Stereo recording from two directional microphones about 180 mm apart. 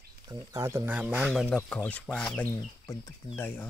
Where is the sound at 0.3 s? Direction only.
20° right (ahead or behind); by 1.6 s centre (ahead or behind).